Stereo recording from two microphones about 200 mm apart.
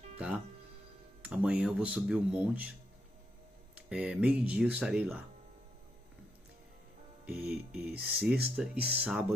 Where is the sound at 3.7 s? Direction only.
5° right (ahead or behind).